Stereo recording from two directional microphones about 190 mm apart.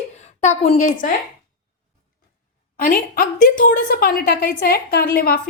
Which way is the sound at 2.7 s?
45° left (ahead or behind).